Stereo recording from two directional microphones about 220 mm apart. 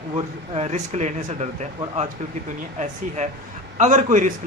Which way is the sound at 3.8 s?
35° right (ahead or behind).